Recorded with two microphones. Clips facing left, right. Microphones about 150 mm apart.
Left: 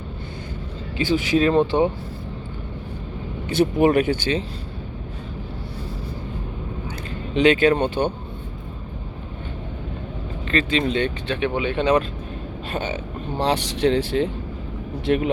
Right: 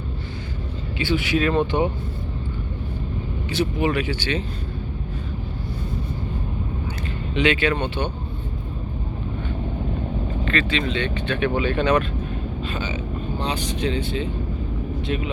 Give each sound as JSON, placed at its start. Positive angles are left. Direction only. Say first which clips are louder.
{"t": 0.9, "sound": "speech", "louder": "left 3 dB", "side_deg": 40}
{"t": 3.5, "sound": "speech", "louder": "left 6 dB", "side_deg": 50}
{"t": 7.3, "sound": "speech", "louder": "left 5 dB", "side_deg": 40}
{"t": 10.5, "sound": "speech", "louder": "left 4 dB", "side_deg": 40}
{"t": 11.3, "sound": "speech", "louder": "right 1 dB", "side_deg": 25}
{"t": 12.7, "sound": "speech", "louder": "left 5 dB", "side_deg": 55}
{"t": 13.4, "sound": "speech", "louder": "left 7 dB", "side_deg": 75}
{"t": 15.0, "sound": "speech", "louder": "left 8 dB", "side_deg": 60}